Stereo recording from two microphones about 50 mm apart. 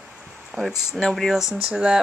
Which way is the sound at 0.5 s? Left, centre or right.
Centre.